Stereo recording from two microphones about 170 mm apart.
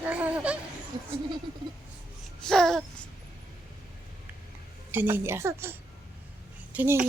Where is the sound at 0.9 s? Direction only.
30° right (ahead or behind).